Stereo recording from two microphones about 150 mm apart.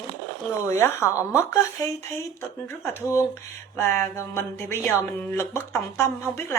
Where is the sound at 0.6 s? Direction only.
15° left (ahead or behind).